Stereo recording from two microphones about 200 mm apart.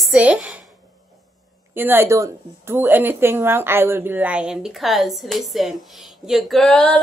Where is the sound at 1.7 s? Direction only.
10° right (ahead or behind).